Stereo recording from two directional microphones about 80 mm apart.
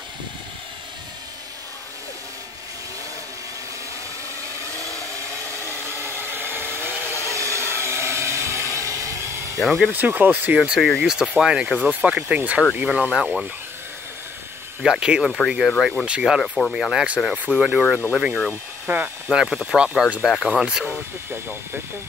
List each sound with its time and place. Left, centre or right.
4.7 s vehicle: right
5.9 s a sound: right
7.3 s a sound: right
9.6 s speech: centre
9.8 s speech: right
10.8 s speech: centre
11.1 s speech: centre
11.7 s speech: centre
14.8 s speech: centre
18.5 s speech: right
19.2 s speech: centre
21.3 s speech: right